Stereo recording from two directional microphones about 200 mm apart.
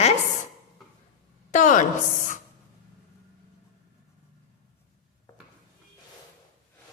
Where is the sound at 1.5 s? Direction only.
40° left (ahead or behind).